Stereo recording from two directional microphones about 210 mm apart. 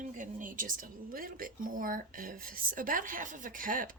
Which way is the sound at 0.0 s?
40° right (ahead or behind).